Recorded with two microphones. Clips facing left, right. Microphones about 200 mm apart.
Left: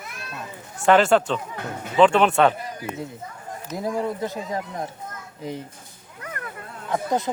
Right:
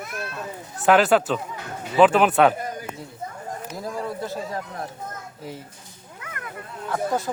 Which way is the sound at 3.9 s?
20° left (ahead or behind).